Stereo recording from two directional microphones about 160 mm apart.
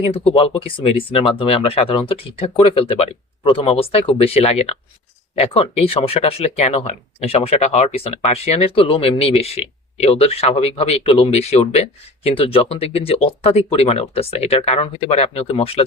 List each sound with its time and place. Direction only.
0.1 s speech: 35° left (ahead or behind)